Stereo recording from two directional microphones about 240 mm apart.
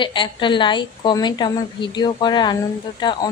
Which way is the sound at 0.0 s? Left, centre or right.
Centre.